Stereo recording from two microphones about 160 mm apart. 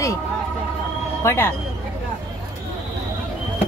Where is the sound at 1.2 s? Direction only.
15° left (ahead or behind).